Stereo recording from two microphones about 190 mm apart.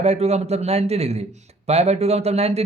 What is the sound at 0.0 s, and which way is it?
Speech, 35° right (ahead or behind).